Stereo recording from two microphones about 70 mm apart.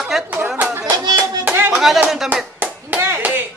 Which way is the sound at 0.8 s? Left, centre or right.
Right.